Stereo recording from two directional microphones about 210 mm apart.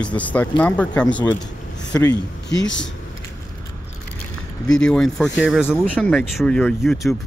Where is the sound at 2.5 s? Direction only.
60° left (ahead or behind).